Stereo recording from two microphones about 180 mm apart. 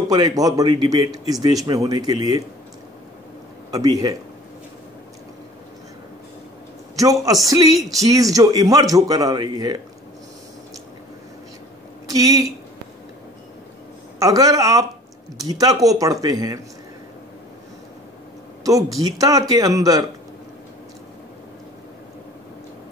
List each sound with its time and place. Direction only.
0.1 s speech: 20° right (ahead or behind)
7.0 s speech: 20° right (ahead or behind)
12.1 s speech: 20° right (ahead or behind)
14.2 s speech: 20° right (ahead or behind)
18.6 s speech: 20° right (ahead or behind)